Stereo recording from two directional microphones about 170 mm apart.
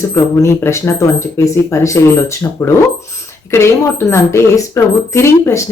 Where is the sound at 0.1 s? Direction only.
15° left (ahead or behind).